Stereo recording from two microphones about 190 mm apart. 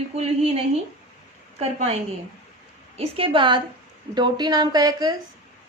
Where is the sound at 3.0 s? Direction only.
25° right (ahead or behind).